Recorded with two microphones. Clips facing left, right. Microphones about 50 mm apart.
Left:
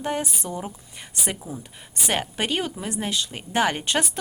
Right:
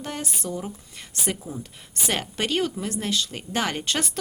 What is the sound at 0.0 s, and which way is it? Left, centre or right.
Speech, centre.